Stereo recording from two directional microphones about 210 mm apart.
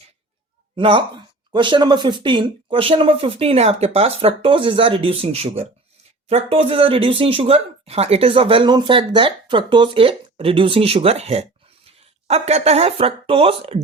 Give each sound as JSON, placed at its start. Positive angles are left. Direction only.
{"t": 0.8, "sound": "speech", "side_deg": -25}